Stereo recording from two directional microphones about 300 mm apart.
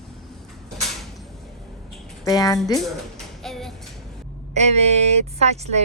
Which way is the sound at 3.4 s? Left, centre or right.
Centre.